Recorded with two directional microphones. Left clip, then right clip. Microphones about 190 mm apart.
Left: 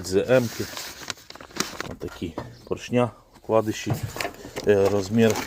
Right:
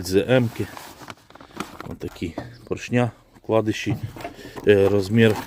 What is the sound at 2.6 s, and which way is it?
Speech, 15° right (ahead or behind).